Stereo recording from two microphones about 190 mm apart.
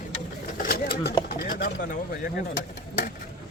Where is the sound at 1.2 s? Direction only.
55° left (ahead or behind).